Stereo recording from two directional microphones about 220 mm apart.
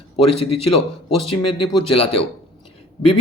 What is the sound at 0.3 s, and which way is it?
A man's voice, 25° left (ahead or behind).